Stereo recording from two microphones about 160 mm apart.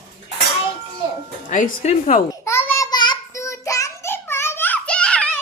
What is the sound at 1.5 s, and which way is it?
Speech, 50° left (ahead or behind).